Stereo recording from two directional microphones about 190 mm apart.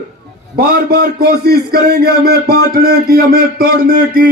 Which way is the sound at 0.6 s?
55° right (ahead or behind).